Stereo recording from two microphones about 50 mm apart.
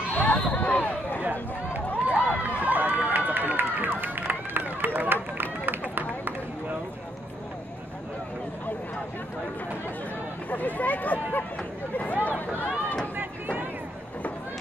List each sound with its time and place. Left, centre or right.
0.3 s a sound: left
2.0 s run: right
10.5 s speech: left
13.1 s run: right